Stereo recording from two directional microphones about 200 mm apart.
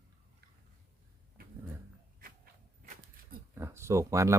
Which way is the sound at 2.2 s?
45° right (ahead or behind).